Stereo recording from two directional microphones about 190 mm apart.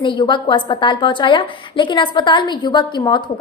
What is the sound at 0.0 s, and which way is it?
A woman's voice, 25° left (ahead or behind).